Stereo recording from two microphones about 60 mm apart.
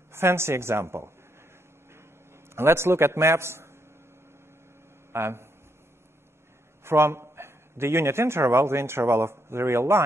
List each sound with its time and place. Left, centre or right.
0.1 s a man's voice: right
2.5 s a man's voice: right
5.1 s a man's voice: right
6.8 s a man's voice: right